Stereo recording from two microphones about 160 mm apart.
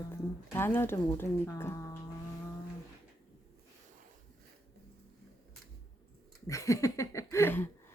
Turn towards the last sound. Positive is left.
turn(degrees=15)  # may be behind; listen again after turning